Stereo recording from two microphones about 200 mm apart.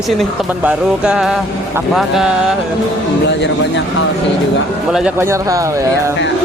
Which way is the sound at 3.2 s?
60° left (ahead or behind).